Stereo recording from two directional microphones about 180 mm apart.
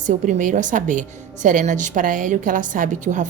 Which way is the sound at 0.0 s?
45° right (ahead or behind).